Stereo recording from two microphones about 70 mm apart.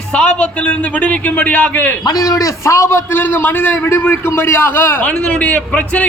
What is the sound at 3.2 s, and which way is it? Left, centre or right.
A man's voice, left.